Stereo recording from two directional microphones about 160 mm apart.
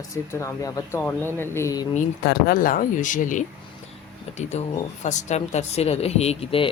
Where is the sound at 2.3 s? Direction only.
85° left.